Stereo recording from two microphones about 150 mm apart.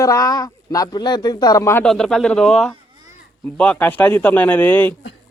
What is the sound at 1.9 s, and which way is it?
Speech, 5° left (ahead or behind).